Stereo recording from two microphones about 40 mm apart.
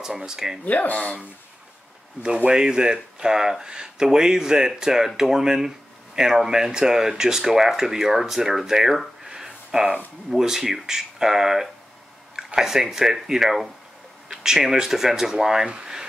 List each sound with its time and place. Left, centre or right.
0.0 s speech: centre
0.7 s speech: left
2.5 s speech: centre
15.6 s a sound: right